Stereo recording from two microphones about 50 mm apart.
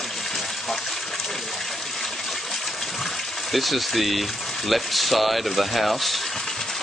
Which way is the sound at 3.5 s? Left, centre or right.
Centre.